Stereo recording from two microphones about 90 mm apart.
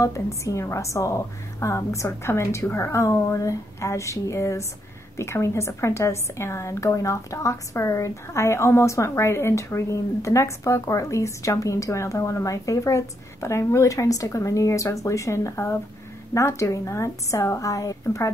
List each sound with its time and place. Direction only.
0.0 s a woman's voice: 35° left (ahead or behind)